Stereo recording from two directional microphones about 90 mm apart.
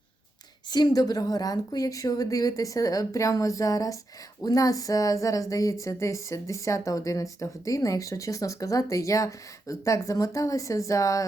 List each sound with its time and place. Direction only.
0.7 s speech: 50° left (ahead or behind)